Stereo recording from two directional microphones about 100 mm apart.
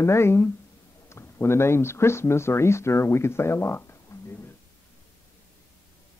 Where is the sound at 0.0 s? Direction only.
25° left (ahead or behind).